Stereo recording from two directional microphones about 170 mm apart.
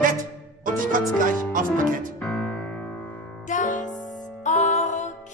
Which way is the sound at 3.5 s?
50° left (ahead or behind).